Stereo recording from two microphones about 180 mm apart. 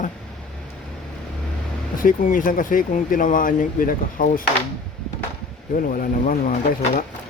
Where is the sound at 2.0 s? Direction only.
50° left (ahead or behind).